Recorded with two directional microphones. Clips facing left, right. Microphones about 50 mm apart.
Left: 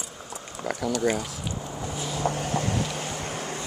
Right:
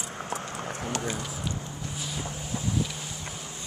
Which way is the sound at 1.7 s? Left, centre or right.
Left.